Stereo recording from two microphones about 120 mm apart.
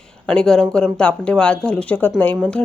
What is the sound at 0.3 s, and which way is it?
A woman's voice, 5° left (ahead or behind).